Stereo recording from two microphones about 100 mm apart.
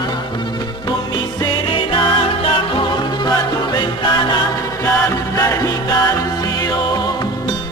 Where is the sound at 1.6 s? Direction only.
60° left (ahead or behind).